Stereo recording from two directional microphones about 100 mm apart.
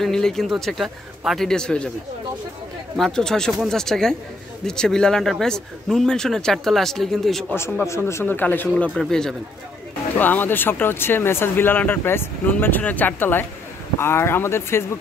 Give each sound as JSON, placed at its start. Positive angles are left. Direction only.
{"t": 0.0, "sound": "speech", "side_deg": 5}
{"t": 3.0, "sound": "speech", "side_deg": 5}
{"t": 7.8, "sound": "speech", "side_deg": 30}
{"t": 8.9, "sound": "speech", "side_deg": 5}
{"t": 10.1, "sound": "speech", "side_deg": 20}